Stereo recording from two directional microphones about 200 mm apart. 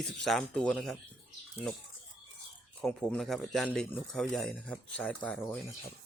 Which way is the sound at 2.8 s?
5° left (ahead or behind).